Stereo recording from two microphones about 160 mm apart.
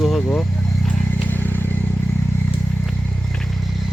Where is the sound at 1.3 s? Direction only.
10° left (ahead or behind).